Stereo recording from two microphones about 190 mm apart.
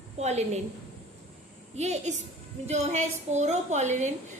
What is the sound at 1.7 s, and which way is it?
A woman's voice, 35° right (ahead or behind).